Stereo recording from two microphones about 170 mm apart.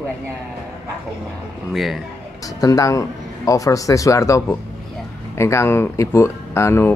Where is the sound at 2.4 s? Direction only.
20° left (ahead or behind).